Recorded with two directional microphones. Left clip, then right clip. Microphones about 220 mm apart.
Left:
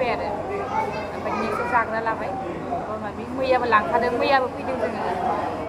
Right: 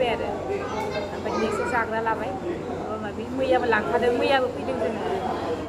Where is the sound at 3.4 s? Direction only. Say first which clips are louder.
Left 3 dB; 5° right (ahead or behind).